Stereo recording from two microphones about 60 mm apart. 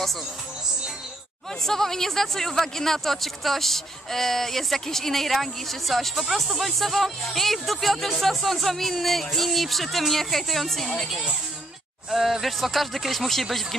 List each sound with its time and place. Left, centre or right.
1.6 s speech: centre